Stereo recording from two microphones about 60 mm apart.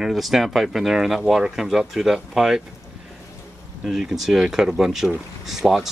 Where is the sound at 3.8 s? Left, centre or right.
Centre.